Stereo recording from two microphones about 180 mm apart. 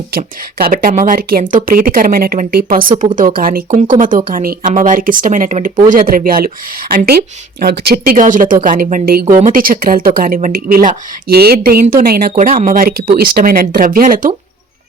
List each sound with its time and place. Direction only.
0.1 s speech: 55° right (ahead or behind)